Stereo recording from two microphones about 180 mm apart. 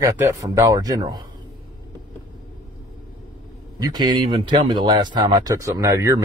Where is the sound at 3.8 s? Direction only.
25° right (ahead or behind).